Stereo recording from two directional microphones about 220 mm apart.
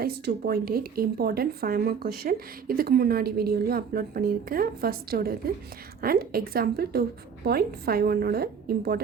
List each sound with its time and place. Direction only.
0.0 s speech: 45° right (ahead or behind)